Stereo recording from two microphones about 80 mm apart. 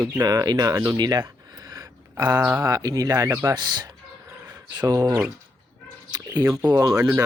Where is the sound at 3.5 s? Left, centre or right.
Right.